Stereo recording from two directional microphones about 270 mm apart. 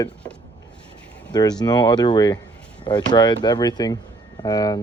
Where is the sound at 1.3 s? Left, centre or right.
Centre.